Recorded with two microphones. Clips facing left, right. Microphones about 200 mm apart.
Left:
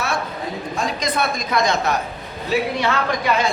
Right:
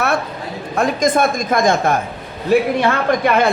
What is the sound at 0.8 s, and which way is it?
Speech, 50° right (ahead or behind).